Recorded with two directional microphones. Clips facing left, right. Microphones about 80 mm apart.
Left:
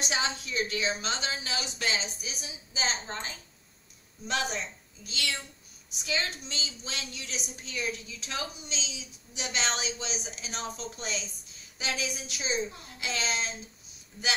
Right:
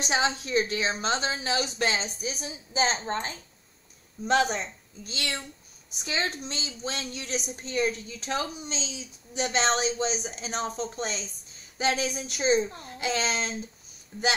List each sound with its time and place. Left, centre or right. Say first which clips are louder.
0.0 s speech: right 5 dB; right